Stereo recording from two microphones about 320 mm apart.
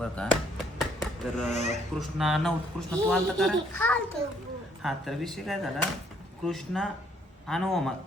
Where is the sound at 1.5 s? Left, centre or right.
Left.